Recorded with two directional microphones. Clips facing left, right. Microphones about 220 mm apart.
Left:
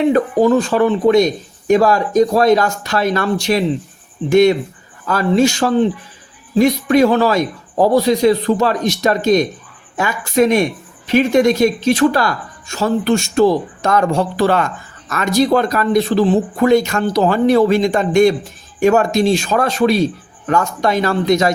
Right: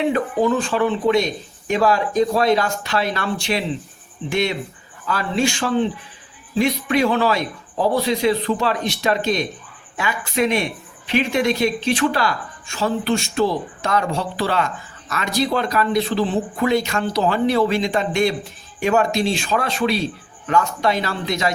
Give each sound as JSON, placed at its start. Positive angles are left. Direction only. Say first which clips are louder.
{"t": 0.1, "sound": "speech", "louder": "left 6 dB", "side_deg": 40}